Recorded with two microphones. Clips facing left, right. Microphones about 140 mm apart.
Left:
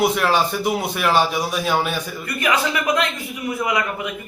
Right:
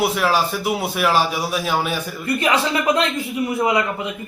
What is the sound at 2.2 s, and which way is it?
A man's voice, 30° right (ahead or behind).